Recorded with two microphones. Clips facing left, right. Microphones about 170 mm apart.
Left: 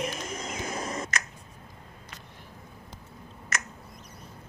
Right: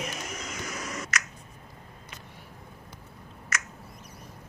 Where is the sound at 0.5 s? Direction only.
30° left (ahead or behind).